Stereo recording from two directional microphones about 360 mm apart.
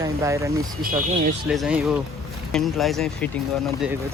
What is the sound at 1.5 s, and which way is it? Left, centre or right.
Speech, centre.